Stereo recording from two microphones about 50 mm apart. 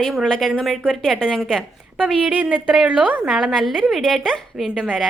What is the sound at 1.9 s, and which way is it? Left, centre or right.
Speech, right.